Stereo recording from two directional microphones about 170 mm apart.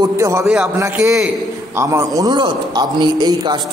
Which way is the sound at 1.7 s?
15° right (ahead or behind).